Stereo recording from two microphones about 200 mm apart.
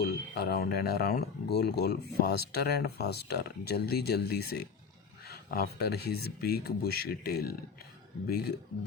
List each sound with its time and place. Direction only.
0.0 s speech: 50° left (ahead or behind)